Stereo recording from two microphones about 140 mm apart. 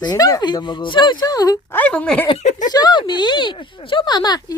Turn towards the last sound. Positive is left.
turn(degrees=30)  # may be behind; listen again after turning